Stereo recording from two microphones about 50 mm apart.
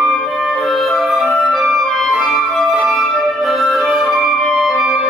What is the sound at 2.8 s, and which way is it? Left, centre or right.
Flute, centre.